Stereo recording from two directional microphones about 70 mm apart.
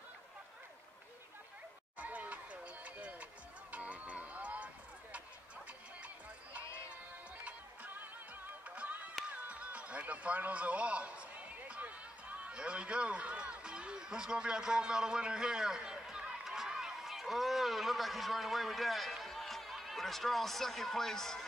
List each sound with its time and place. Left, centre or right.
2.0 s a sound: right
3.7 s music: right
7.4 s music: right; by 21.5 s centre